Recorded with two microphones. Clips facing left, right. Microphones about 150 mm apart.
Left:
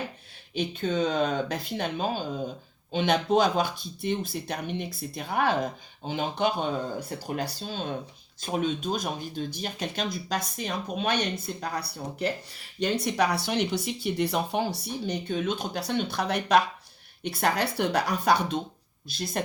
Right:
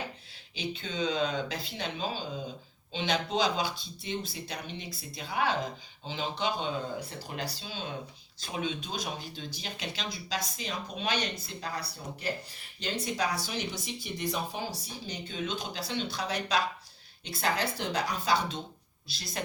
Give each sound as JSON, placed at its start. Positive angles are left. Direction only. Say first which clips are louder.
{"t": 0.5, "sound": "speech", "louder": "left 8 dB", "side_deg": 50}
{"t": 19.0, "sound": "speech", "louder": "left 10 dB", "side_deg": 50}